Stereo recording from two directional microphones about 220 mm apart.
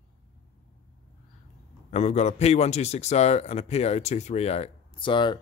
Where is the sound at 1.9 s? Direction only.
30° left (ahead or behind).